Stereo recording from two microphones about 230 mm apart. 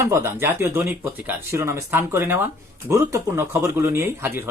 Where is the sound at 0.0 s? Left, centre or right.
Centre.